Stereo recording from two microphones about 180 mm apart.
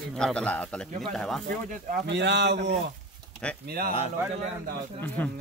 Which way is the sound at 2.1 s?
75° right (ahead or behind).